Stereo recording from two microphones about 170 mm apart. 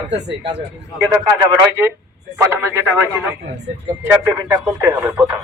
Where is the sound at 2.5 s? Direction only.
15° right (ahead or behind).